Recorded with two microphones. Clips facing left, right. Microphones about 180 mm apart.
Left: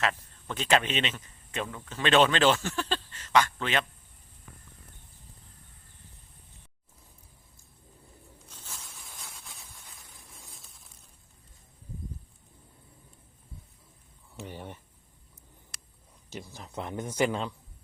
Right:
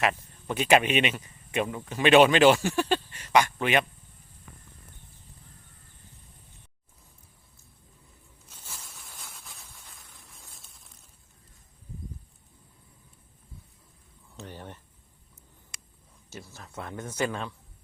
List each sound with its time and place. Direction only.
0.0 s speech: 15° right (ahead or behind)
8.4 s a sound: 5° right (ahead or behind)
14.3 s speech: 10° left (ahead or behind)
16.3 s speech: 15° left (ahead or behind)